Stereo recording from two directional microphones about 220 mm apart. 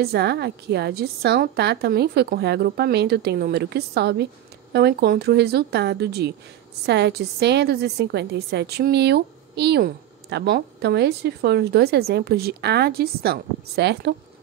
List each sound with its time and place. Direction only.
0.0 s a woman's voice: 45° right (ahead or behind)